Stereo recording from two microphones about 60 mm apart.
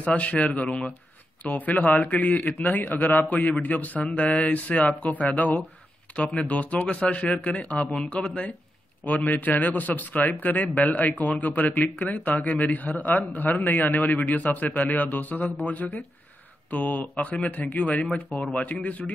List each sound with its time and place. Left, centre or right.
0.0 s a man's voice: left